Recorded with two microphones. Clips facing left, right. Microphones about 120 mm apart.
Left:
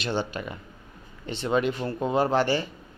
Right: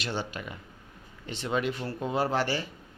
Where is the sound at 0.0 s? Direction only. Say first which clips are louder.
Left 5 dB; 25° left (ahead or behind).